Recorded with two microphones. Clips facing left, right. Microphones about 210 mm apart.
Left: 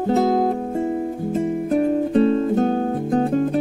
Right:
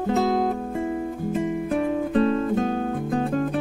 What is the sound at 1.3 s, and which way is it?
Music, 45° left (ahead or behind).